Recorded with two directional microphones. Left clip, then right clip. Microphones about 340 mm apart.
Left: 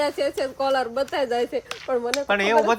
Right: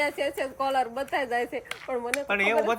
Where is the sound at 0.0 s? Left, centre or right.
Centre.